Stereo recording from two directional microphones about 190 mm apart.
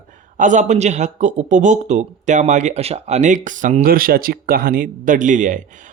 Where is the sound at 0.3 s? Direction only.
40° right (ahead or behind).